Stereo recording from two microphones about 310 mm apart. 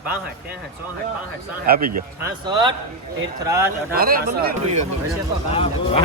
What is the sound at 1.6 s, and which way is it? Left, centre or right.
Speech, right.